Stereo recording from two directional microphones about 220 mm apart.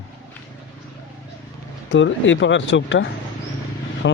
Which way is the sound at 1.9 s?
55° left (ahead or behind).